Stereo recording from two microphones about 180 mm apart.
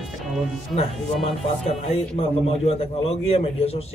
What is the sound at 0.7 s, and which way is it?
Speech, 5° left (ahead or behind).